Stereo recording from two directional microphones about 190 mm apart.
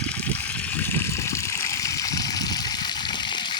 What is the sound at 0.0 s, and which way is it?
Water, 5° left (ahead or behind).